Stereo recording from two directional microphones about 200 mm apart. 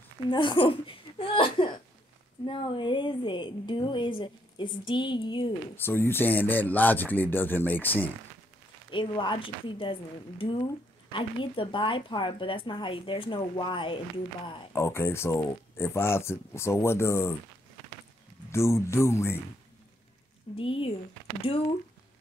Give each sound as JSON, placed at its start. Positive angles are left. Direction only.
{"t": 0.3, "sound": "a woman's voice", "side_deg": 25}
{"t": 5.8, "sound": "speech", "side_deg": 10}
{"t": 8.9, "sound": "a woman's voice", "side_deg": 25}
{"t": 14.7, "sound": "speech", "side_deg": 15}
{"t": 18.5, "sound": "speech", "side_deg": 15}
{"t": 20.5, "sound": "a woman's voice", "side_deg": 25}